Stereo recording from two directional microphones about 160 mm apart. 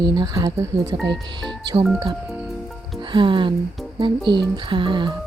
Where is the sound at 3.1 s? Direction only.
30° right (ahead or behind).